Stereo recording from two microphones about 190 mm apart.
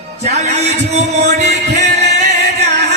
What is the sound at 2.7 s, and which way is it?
Music, 60° right (ahead or behind).